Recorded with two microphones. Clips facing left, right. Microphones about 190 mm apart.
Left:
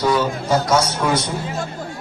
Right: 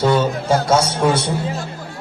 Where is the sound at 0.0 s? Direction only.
25° right (ahead or behind).